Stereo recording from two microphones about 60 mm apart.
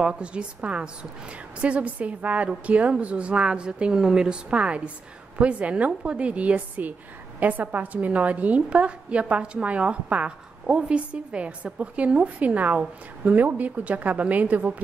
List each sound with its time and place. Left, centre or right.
0.0 s a woman's voice: centre